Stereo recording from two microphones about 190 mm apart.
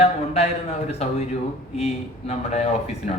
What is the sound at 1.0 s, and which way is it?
A man's voice, 35° left (ahead or behind).